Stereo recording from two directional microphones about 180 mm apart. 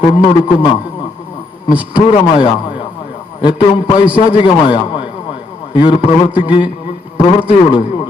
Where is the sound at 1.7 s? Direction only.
5° right (ahead or behind).